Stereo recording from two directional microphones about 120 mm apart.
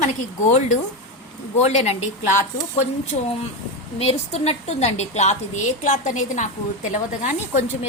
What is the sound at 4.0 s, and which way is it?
A woman's voice, 60° left (ahead or behind).